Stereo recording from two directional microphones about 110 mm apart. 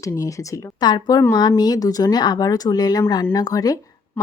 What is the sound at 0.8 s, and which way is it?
Speech, 40° left (ahead or behind).